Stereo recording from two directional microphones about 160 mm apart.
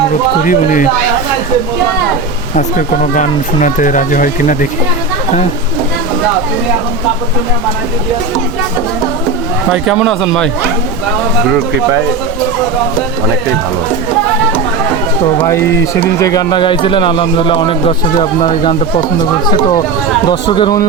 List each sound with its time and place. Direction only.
0.4 s a man's voice: 55° left (ahead or behind)
2.6 s speech: 50° left (ahead or behind)
9.6 s speech: centre (ahead or behind)
15.4 s speech: 15° left (ahead or behind)